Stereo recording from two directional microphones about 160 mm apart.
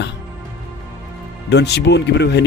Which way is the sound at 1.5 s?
90° left.